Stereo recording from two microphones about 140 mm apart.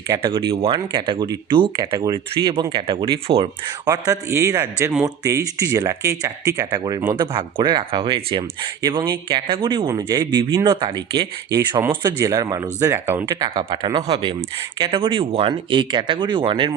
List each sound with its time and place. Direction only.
0.2 s speech: 35° right (ahead or behind)
3.8 s speech: 25° right (ahead or behind)
12.2 s speech: 25° right (ahead or behind)